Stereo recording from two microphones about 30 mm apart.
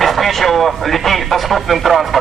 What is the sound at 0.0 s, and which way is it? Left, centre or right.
Speech, centre.